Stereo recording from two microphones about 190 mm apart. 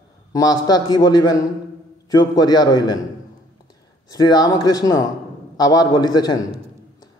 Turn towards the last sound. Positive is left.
turn(degrees=20)  # may be behind; listen again after turning